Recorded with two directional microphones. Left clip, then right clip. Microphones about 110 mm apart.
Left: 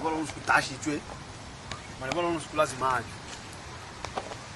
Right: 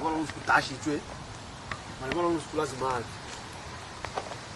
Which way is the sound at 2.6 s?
30° left (ahead or behind).